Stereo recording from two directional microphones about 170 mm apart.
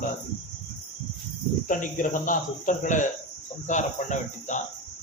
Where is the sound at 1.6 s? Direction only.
50° left (ahead or behind).